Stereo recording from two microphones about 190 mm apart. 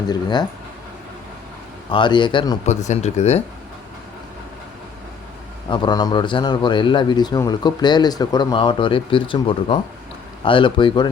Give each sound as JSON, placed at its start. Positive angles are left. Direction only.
{"t": 0.1, "sound": "a man's voice", "side_deg": 25}
{"t": 1.9, "sound": "a man's voice", "side_deg": 25}
{"t": 2.6, "sound": "speech", "side_deg": 40}
{"t": 5.6, "sound": "a man's voice", "side_deg": 25}